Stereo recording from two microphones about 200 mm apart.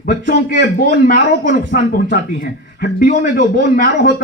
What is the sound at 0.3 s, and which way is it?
A man's voice, 50° left (ahead or behind).